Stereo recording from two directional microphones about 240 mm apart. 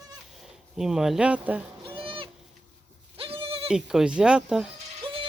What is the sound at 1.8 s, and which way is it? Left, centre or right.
Goat, right.